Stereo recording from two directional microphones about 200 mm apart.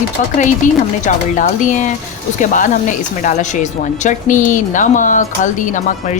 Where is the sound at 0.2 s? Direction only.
40° left (ahead or behind).